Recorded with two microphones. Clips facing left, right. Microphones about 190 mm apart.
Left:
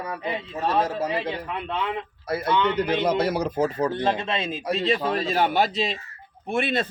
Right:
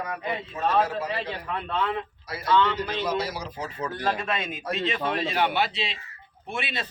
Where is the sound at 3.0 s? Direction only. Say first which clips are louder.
Left 6 dB; 55° left (ahead or behind).